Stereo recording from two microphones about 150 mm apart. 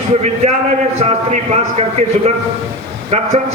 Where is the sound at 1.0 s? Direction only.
45° right (ahead or behind).